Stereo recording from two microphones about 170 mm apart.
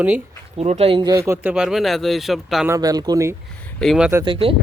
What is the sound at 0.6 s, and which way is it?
Speech, 35° right (ahead or behind).